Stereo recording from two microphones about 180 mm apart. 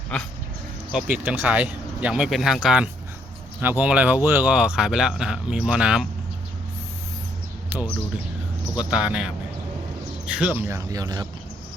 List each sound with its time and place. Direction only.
1.1 s speech: 10° right (ahead or behind)
7.7 s a sound: 10° right (ahead or behind)
8.8 s speech: 5° right (ahead or behind); by 11.3 s 20° right (ahead or behind)